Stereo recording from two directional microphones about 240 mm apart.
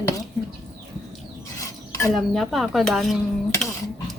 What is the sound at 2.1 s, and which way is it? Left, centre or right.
Speech, centre.